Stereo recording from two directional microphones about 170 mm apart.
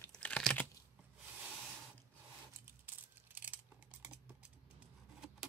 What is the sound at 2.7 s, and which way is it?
Typing, 10° right (ahead or behind).